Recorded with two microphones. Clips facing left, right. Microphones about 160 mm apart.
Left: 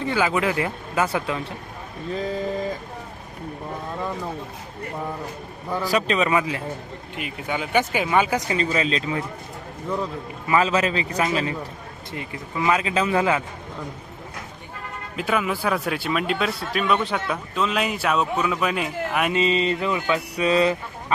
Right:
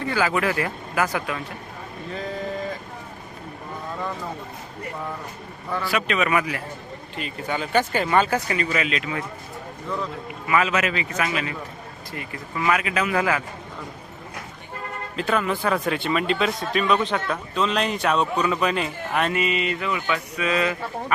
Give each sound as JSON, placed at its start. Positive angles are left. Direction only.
{"t": 0.0, "sound": "speech", "side_deg": 20}
{"t": 5.8, "sound": "speech", "side_deg": 35}
{"t": 7.2, "sound": "speech", "side_deg": 10}
{"t": 8.5, "sound": "speech", "side_deg": 30}
{"t": 10.5, "sound": "mantra", "side_deg": 30}
{"t": 12.1, "sound": "speech", "side_deg": 20}
{"t": 15.1, "sound": "speech", "side_deg": 5}
{"t": 19.3, "sound": "mantra", "side_deg": 30}